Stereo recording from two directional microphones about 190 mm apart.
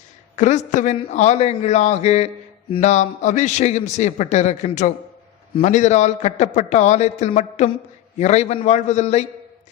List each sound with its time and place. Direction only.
0.3 s a man's voice: 40° left (ahead or behind)